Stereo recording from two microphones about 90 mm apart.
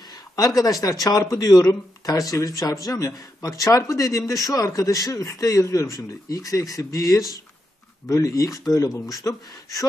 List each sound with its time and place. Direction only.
0.4 s speech: 45° left (ahead or behind)